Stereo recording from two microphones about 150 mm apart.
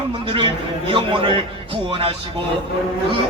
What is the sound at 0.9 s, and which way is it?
A man's voice, 35° right (ahead or behind).